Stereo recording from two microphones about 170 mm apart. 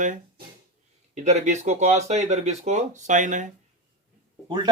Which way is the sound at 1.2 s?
40° right (ahead or behind).